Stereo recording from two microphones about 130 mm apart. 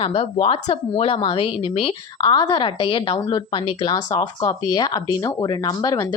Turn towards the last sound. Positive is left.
turn(degrees=30)  # may be behind; listen again after turning